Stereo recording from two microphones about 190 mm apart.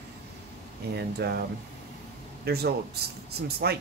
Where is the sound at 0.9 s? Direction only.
55° right (ahead or behind).